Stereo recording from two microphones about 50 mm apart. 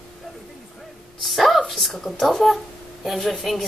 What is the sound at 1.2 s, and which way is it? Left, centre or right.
Speech, centre.